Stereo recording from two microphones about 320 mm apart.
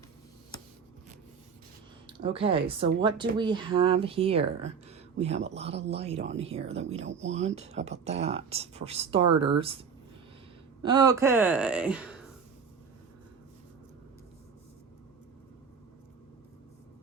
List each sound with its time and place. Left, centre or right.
2.0 s speech: centre
10.8 s speech: centre